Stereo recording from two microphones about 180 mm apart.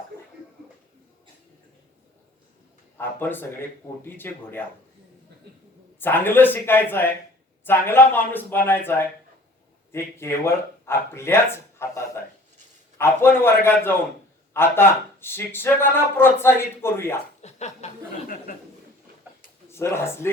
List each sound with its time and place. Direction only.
3.0 s speech: 10° left (ahead or behind)
6.0 s speech: 10° left (ahead or behind)
17.4 s chuckle: 40° left (ahead or behind)
19.7 s speech: 15° left (ahead or behind)